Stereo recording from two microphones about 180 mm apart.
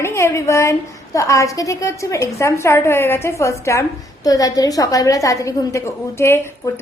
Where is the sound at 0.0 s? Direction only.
15° left (ahead or behind).